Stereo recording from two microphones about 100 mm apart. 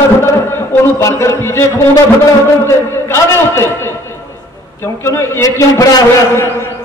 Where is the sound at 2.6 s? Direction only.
25° left (ahead or behind).